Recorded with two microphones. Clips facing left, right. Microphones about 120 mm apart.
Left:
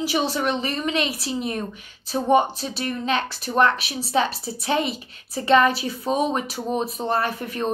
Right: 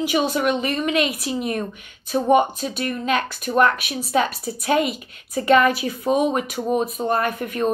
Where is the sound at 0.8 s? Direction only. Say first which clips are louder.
Right 3 dB; 35° left (ahead or behind).